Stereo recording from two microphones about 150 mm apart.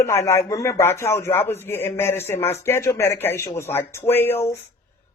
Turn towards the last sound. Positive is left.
turn(degrees=15)  # may be behind; listen again after turning